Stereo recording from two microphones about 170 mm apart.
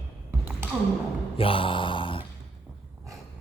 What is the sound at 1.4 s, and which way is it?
Mantra, 30° left (ahead or behind).